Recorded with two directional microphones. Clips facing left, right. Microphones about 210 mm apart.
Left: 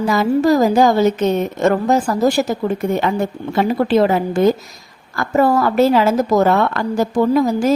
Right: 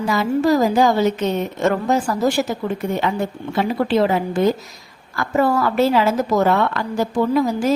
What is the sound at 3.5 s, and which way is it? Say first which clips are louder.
A woman's voice: left 3 dB; 45° left (ahead or behind).